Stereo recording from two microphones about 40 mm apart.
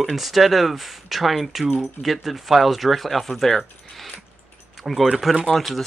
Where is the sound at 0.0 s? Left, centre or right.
Centre.